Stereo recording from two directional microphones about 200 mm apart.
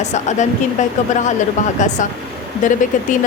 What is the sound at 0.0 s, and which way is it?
A woman's voice, 35° left (ahead or behind).